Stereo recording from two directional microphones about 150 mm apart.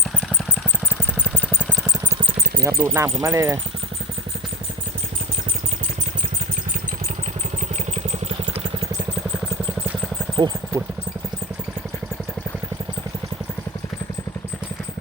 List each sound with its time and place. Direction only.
1.4 s vehicle: 10° left (ahead or behind)
2.6 s speech: 20° right (ahead or behind)
10.4 s speech: 30° right (ahead or behind)